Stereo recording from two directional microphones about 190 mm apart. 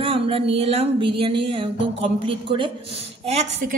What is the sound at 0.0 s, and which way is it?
Speech, 30° right (ahead or behind).